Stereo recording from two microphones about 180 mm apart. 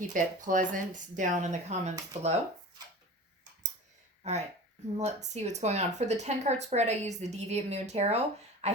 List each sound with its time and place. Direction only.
0.1 s speech: 45° right (ahead or behind)
4.2 s speech: 40° right (ahead or behind)
8.6 s a sound: 35° right (ahead or behind)